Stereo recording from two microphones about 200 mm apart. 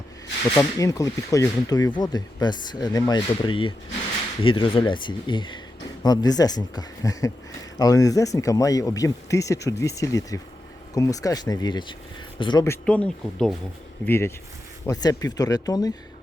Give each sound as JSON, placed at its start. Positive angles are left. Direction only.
{"t": 0.5, "sound": "speech", "side_deg": 15}